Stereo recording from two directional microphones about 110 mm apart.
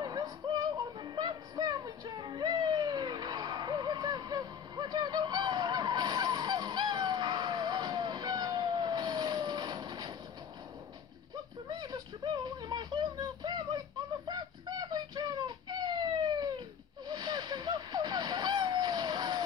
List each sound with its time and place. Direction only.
0.0 s music: 40° right (ahead or behind)
11.7 s a sound: 35° right (ahead or behind)
17.1 s vehicle: 40° right (ahead or behind)